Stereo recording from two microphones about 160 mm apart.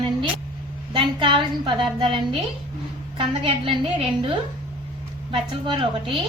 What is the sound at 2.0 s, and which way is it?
A woman's voice, 30° right (ahead or behind).